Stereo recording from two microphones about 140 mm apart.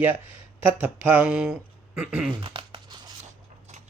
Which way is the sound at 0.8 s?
10° right (ahead or behind).